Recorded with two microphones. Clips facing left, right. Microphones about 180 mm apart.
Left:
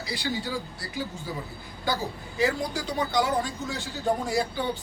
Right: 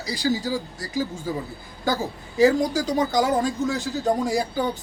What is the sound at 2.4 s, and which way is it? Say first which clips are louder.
Speech: right 8 dB; 45° right (ahead or behind).